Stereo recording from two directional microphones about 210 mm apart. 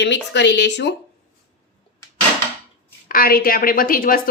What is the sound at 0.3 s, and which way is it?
Speech, 55° left (ahead or behind).